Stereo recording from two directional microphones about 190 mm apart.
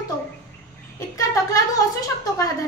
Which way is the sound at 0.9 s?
15° left (ahead or behind).